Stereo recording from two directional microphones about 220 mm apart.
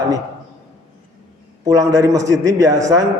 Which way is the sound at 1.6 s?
15° right (ahead or behind).